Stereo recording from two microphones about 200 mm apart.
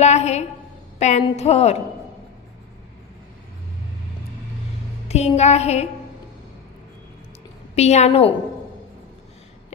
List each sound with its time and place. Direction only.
0.0 s music: 35° left (ahead or behind)
5.0 s music: 30° left (ahead or behind)
7.7 s music: 35° left (ahead or behind)